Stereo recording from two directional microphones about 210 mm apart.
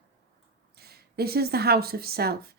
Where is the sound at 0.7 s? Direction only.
50° right (ahead or behind).